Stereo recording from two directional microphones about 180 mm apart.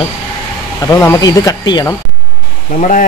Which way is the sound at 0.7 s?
15° left (ahead or behind).